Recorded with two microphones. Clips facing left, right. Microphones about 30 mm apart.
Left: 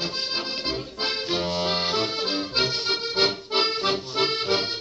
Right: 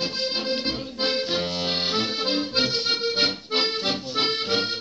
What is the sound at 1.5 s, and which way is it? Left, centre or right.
Accordion, centre.